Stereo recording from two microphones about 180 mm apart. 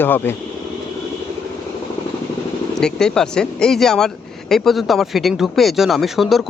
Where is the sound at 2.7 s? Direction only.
5° left (ahead or behind).